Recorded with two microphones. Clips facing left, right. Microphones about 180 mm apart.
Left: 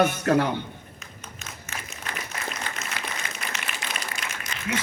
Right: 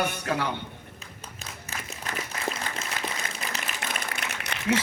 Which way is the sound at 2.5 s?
30° right (ahead or behind).